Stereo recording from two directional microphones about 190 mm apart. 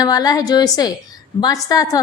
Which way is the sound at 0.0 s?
20° left (ahead or behind).